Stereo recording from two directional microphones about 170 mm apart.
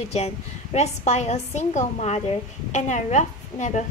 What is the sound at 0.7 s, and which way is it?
A woman's voice, 40° left (ahead or behind).